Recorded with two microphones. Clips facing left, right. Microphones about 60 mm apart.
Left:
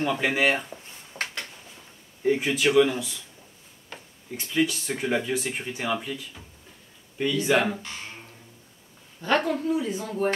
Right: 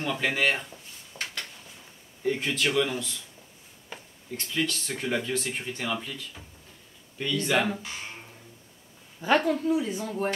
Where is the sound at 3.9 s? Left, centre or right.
Centre.